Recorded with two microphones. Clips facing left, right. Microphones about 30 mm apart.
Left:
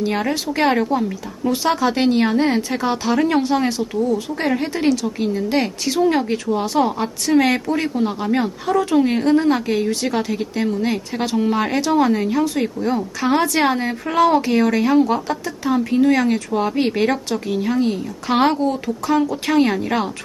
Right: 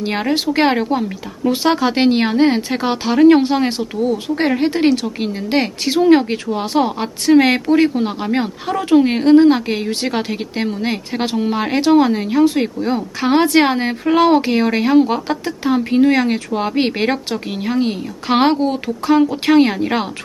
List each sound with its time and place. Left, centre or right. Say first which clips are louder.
0.0 s a woman's voice: right 2 dB; right
11.3 s speech: left 2 dB; centre
11.7 s a woman's voice: right 8 dB; right
12.5 s a woman's voice: right 3 dB; right